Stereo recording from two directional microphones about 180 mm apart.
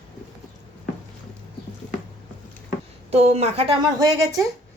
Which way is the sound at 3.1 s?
35° right (ahead or behind).